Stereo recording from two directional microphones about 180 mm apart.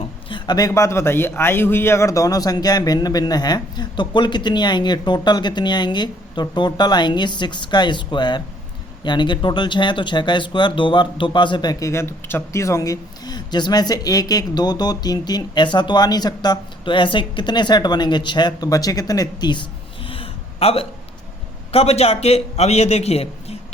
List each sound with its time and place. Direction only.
0.3 s speech: 25° left (ahead or behind)
20.1 s a sound: 30° left (ahead or behind)
21.7 s a man's voice: 35° left (ahead or behind)